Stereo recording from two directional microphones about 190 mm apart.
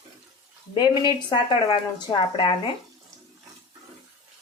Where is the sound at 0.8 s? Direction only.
25° left (ahead or behind).